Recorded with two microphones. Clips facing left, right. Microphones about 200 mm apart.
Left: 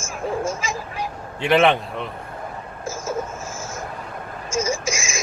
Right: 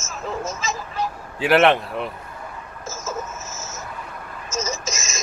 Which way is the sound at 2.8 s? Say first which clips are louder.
Left 4 dB; 10° left (ahead or behind).